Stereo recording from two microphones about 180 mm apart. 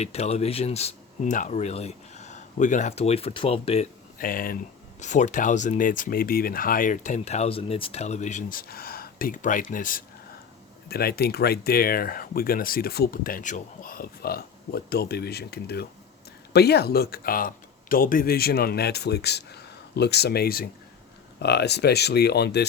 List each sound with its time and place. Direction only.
0.0 s speech: 35° left (ahead or behind)
4.2 s speech: 50° left (ahead or behind)
4.9 s speech: 40° left (ahead or behind)
10.8 s speech: 60° left (ahead or behind)